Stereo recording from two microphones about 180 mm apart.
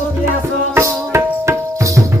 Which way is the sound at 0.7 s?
15° right (ahead or behind).